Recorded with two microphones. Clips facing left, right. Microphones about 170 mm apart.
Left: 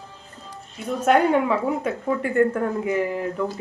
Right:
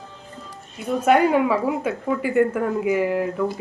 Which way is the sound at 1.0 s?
5° right (ahead or behind).